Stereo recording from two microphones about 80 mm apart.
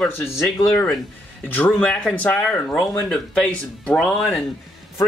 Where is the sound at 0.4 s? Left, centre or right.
Left.